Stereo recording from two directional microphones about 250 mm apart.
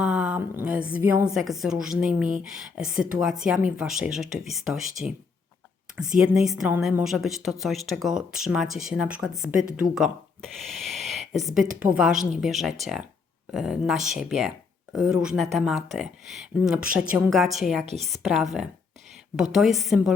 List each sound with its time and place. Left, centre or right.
0.0 s speech: centre
10.7 s a sound: centre
11.3 s speech: centre
17.8 s a woman's voice: right
18.2 s speech: centre